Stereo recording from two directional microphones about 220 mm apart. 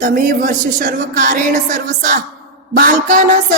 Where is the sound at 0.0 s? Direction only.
35° right (ahead or behind).